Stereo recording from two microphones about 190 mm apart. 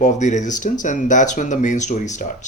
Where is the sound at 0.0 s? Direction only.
40° left (ahead or behind).